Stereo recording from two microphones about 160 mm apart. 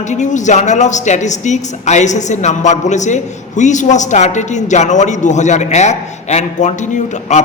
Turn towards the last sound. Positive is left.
turn(degrees=50)  # may be behind; listen again after turning